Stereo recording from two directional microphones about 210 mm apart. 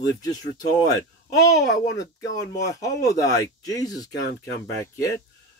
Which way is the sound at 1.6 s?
15° left (ahead or behind).